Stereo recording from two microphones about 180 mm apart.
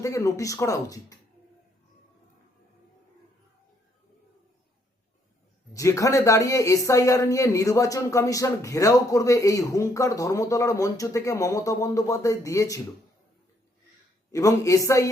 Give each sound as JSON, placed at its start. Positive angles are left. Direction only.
{"t": 0.0, "sound": "speech", "side_deg": 15}
{"t": 5.7, "sound": "speech", "side_deg": 20}
{"t": 14.3, "sound": "speech", "side_deg": 15}